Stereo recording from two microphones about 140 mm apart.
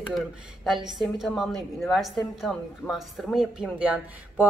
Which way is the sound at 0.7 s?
Centre (ahead or behind).